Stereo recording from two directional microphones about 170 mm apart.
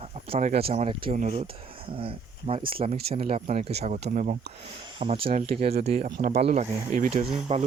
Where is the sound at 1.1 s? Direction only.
45° right (ahead or behind).